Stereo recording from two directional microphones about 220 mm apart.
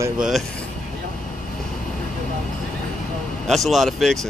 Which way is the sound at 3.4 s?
Centre (ahead or behind).